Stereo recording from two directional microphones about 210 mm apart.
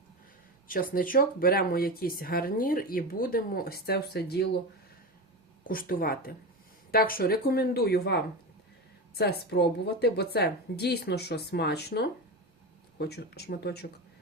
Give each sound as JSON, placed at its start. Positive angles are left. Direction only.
{"t": 0.7, "sound": "speech", "side_deg": 40}
{"t": 5.6, "sound": "speech", "side_deg": 40}